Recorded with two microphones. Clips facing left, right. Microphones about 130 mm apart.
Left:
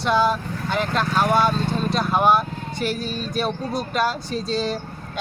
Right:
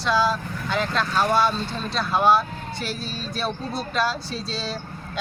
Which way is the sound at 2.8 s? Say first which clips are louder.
Left 7 dB; 50° left (ahead or behind).